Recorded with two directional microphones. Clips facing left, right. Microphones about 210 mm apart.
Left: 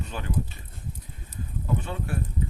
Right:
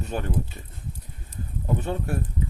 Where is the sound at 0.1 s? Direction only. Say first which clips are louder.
Right 8 dB; 50° right (ahead or behind).